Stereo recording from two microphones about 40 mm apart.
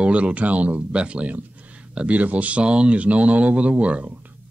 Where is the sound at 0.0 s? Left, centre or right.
Right.